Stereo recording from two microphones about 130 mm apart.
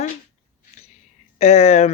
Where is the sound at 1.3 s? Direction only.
55° left (ahead or behind).